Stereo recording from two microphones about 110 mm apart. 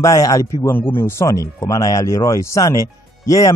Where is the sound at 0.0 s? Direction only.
30° left (ahead or behind).